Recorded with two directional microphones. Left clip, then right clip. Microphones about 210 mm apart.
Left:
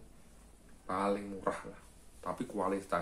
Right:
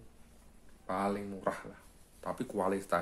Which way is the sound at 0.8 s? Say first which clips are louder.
Left 1 dB; 35° right (ahead or behind).